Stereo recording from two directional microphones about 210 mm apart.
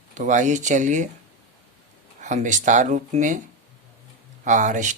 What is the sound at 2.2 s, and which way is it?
Speech, 35° right (ahead or behind).